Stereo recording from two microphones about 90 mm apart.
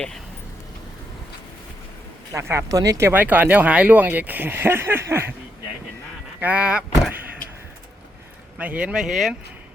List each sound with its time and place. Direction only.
2.3 s speech: 30° right (ahead or behind)
3.1 s speech: 20° right (ahead or behind)
6.4 s speech: 15° right (ahead or behind)
8.5 s speech: 15° right (ahead or behind)